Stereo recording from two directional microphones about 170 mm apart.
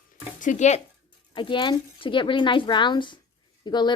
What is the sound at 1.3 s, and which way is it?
A woman's voice, 30° left (ahead or behind).